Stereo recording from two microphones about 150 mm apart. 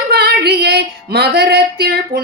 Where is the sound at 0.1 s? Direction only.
90° right.